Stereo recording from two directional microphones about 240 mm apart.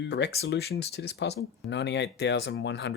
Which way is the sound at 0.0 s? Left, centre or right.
Left.